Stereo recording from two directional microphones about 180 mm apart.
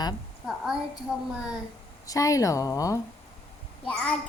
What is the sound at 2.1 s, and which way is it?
Speech, 20° left (ahead or behind).